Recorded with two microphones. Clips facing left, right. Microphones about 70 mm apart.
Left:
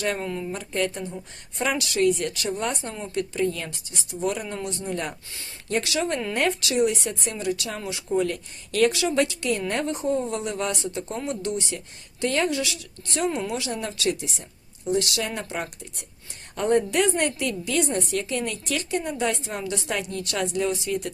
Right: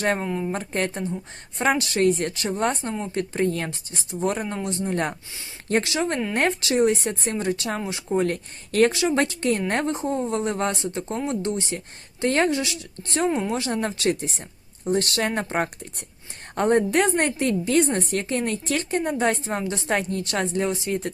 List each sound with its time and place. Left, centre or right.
0.0 s a woman's voice: right
8.9 s speech: right
9.2 s a woman's voice: right
13.6 s a woman's voice: right